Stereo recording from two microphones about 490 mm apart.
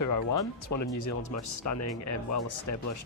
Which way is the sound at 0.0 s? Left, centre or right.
Left.